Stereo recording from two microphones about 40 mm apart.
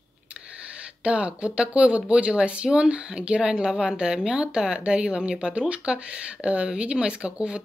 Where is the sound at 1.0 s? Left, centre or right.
Right.